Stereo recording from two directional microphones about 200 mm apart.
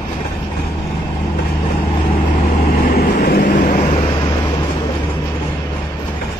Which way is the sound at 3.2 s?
50° left (ahead or behind).